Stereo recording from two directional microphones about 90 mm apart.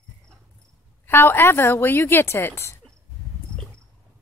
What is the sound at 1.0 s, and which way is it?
A woman's voice, 25° left (ahead or behind).